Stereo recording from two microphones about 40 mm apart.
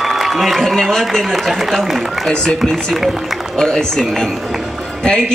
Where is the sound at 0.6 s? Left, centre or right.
Centre.